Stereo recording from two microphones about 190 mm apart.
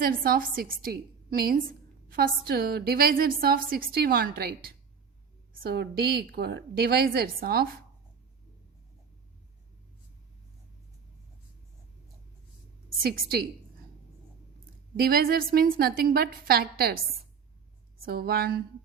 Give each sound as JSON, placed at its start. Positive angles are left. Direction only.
{"t": 0.0, "sound": "a woman's voice", "side_deg": -50}
{"t": 13.0, "sound": "a woman's voice", "side_deg": -55}
{"t": 14.9, "sound": "a woman's voice", "side_deg": -50}
{"t": 18.0, "sound": "a woman's voice", "side_deg": -55}